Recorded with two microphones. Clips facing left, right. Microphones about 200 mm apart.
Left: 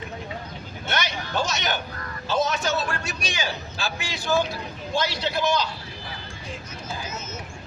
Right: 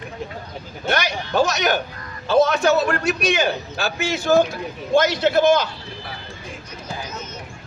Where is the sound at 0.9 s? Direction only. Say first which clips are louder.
Right 6 dB; 60° right (ahead or behind).